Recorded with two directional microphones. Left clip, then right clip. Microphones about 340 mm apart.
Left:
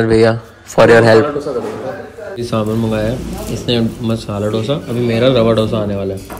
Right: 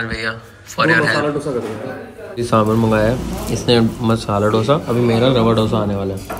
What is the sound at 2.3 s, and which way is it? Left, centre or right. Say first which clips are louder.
A man's voice: right 3 dB; centre.